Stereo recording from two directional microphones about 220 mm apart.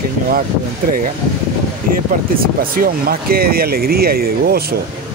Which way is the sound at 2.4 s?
40° right (ahead or behind).